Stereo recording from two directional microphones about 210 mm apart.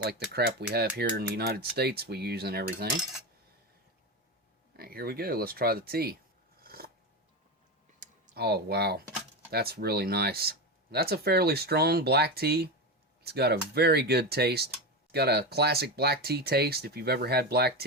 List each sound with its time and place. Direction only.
0.7 s speech: 50° right (ahead or behind)
4.8 s speech: 45° right (ahead or behind)
6.6 s a sound: 45° right (ahead or behind)
7.9 s computer keyboard: 45° right (ahead or behind)
9.5 s speech: 50° right (ahead or behind)